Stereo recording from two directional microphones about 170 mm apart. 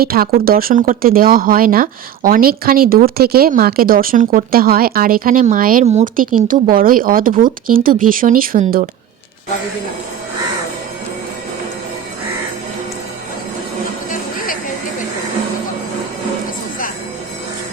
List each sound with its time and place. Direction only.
0.0 s speech: 60° right (ahead or behind)
5.8 s speech: 40° right (ahead or behind)
14.1 s music: 55° left (ahead or behind)